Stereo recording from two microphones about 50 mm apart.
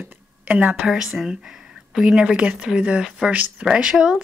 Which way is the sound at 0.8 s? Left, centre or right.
Centre.